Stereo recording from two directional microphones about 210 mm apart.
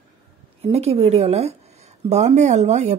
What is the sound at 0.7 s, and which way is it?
A woman's voice, 30° right (ahead or behind).